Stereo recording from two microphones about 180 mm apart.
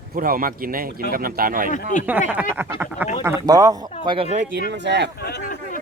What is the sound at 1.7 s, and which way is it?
Speech, 45° left (ahead or behind).